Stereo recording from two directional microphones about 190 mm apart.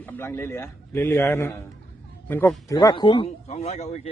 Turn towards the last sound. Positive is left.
turn(degrees=35)  # may be behind; listen again after turning